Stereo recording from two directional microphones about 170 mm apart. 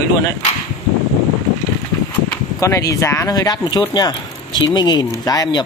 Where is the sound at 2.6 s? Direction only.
20° left (ahead or behind).